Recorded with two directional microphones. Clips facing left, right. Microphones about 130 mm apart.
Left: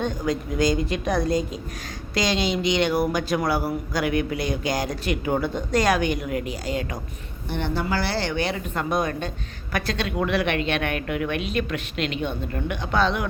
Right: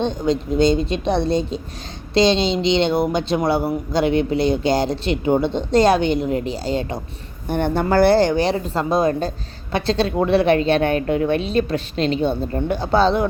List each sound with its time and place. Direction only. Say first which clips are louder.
0.0 s speech: right 5 dB; 25° right (ahead or behind)
7.5 s a woman's voice: right 8 dB; 50° right (ahead or behind); by 13.2 s 30° right (ahead or behind)